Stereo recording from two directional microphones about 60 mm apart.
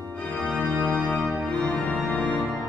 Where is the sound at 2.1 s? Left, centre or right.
Left.